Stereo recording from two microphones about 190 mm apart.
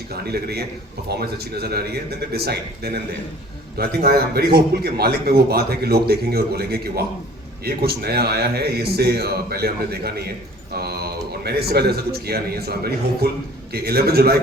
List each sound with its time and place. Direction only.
0.3 s a man's voice: 55° right (ahead or behind)